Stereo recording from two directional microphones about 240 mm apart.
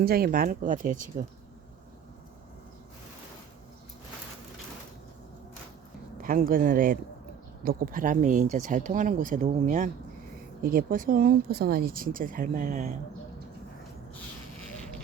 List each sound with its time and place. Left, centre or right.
0.0 s speech: right
6.2 s speech: right